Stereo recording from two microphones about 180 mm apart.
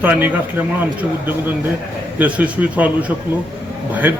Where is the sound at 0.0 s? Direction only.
10° right (ahead or behind).